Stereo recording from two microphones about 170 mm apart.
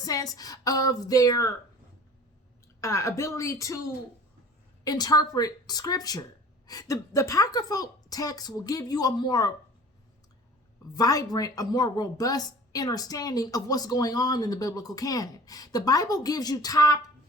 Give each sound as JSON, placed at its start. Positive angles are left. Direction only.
{"t": 0.0, "sound": "a woman's voice", "side_deg": 20}
{"t": 2.8, "sound": "a woman's voice", "side_deg": 15}
{"t": 4.8, "sound": "a woman's voice", "side_deg": 20}
{"t": 10.9, "sound": "a woman's voice", "side_deg": 20}